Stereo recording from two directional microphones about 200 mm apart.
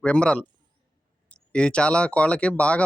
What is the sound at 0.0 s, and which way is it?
Speech, 5° left (ahead or behind).